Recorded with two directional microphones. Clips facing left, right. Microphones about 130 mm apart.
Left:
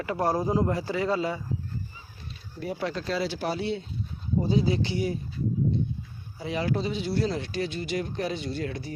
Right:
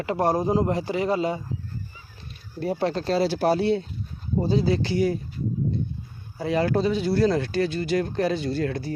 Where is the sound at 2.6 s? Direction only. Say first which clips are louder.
Right 6 dB; 35° right (ahead or behind).